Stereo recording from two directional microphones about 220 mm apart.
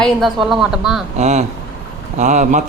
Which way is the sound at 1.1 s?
30° right (ahead or behind).